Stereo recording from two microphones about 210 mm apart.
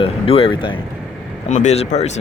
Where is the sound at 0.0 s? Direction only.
25° left (ahead or behind).